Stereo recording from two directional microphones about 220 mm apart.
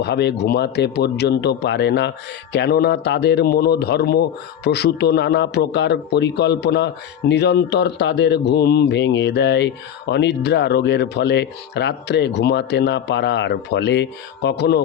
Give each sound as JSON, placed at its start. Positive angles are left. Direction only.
{"t": 0.0, "sound": "speech", "side_deg": 50}